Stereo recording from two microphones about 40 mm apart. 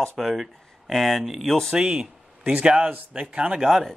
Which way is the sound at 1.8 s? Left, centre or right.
Right.